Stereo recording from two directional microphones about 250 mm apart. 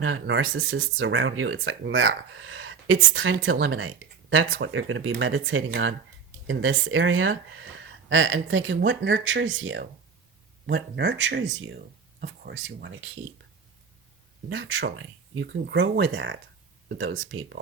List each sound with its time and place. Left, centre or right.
0.0 s speech: right
14.5 s speech: right